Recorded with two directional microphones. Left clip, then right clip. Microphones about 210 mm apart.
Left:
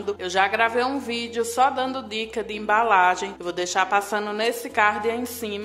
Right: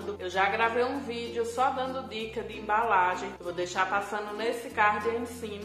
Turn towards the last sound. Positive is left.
turn(degrees=45)  # may be behind; listen again after turning